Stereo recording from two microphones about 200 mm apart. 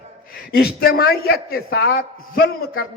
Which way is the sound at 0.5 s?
50° left (ahead or behind).